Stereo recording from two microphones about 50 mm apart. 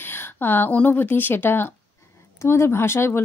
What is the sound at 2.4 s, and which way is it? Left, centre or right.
Speech, left.